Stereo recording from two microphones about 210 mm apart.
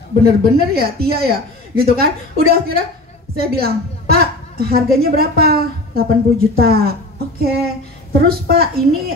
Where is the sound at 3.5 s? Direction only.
45° right (ahead or behind).